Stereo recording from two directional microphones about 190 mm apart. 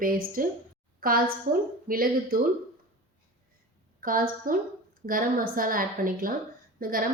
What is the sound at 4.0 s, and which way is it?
A woman's voice, 45° right (ahead or behind).